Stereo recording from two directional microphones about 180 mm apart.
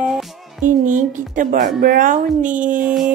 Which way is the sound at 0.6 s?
45° right (ahead or behind).